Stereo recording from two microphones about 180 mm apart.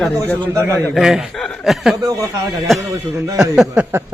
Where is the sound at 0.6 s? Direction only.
15° right (ahead or behind).